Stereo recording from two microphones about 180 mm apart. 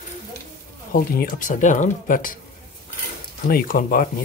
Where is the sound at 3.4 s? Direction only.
50° left (ahead or behind).